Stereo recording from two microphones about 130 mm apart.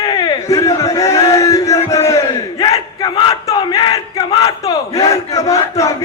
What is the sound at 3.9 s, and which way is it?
Battle cry, 25° left (ahead or behind).